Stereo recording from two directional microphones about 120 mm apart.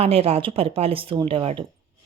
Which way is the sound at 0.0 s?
55° right (ahead or behind).